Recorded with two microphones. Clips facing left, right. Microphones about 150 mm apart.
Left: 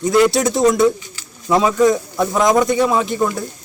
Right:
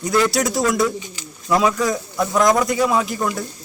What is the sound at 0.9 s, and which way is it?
Bird, 20° right (ahead or behind).